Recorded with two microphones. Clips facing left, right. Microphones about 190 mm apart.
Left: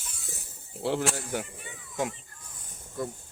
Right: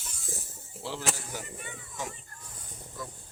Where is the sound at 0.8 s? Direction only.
55° left (ahead or behind).